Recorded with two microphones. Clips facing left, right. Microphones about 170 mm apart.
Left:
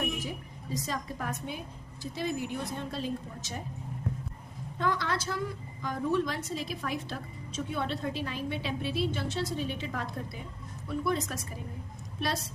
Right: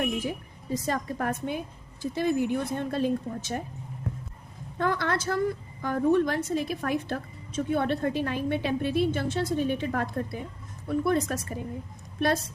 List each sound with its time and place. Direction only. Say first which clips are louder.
0.0 s a woman's voice: right 5 dB; 55° right (ahead or behind)
4.8 s a woman's voice: right 4 dB; 55° right (ahead or behind)